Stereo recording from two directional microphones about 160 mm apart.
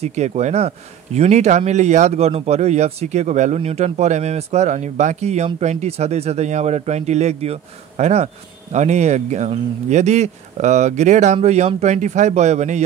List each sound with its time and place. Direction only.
0.0 s a man's voice: 45° right (ahead or behind)